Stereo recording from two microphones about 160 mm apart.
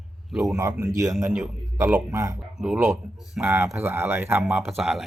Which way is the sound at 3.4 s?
15° right (ahead or behind).